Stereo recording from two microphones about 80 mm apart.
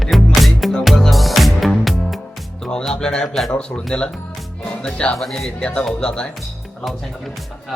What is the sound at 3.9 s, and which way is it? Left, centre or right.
Speech, centre.